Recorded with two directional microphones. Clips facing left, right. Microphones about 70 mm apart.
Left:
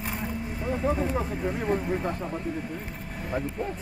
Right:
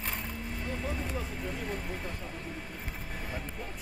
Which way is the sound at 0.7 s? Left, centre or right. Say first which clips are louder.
Left 11 dB; left.